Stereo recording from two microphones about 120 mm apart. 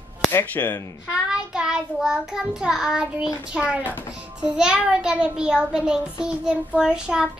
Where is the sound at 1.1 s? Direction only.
5° right (ahead or behind).